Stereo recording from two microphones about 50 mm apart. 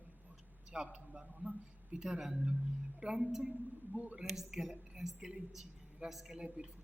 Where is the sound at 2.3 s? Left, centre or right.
Right.